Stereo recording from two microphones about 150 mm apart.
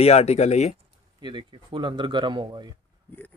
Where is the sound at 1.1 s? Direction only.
30° right (ahead or behind).